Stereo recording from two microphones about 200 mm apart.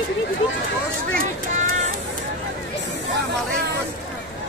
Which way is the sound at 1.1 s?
35° right (ahead or behind).